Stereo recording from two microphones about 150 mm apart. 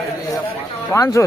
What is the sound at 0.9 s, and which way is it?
Speech, 20° left (ahead or behind).